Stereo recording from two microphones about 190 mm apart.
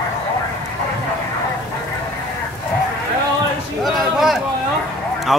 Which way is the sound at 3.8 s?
Centre (ahead or behind).